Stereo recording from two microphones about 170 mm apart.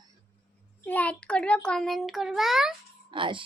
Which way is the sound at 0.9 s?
10° left (ahead or behind).